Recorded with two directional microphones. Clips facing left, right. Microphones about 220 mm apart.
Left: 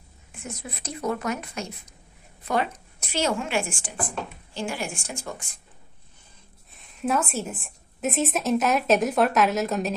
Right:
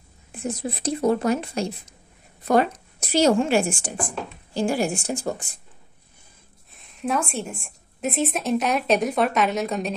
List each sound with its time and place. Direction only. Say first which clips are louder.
0.3 s a woman's voice: right 9 dB; 35° right (ahead or behind)
6.7 s a woman's voice: even; centre (ahead or behind)